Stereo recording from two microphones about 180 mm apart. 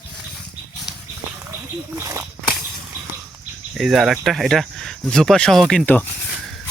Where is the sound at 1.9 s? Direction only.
15° right (ahead or behind).